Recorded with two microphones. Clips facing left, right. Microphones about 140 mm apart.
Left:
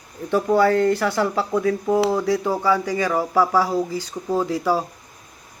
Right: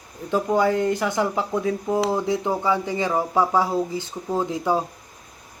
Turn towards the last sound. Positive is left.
turn(degrees=-20)  # may be behind; listen again after turning